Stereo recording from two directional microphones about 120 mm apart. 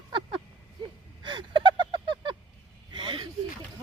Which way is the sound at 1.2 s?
45° right (ahead or behind).